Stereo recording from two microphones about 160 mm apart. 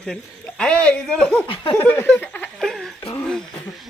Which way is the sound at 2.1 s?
10° left (ahead or behind).